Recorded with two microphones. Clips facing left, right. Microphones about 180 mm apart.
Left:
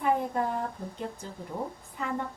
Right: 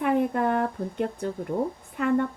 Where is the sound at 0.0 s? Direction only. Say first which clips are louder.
Right 4 dB; 70° right (ahead or behind).